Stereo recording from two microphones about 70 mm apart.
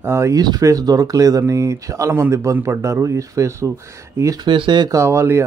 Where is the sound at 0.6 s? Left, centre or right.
Right.